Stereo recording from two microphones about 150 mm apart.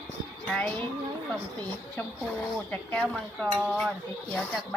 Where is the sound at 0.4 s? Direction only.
10° left (ahead or behind).